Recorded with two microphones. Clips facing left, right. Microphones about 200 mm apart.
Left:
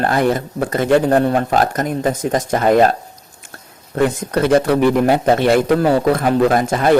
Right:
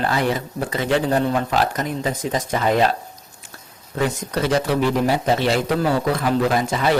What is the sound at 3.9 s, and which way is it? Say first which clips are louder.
Speech: left 6 dB; 55° left (ahead or behind).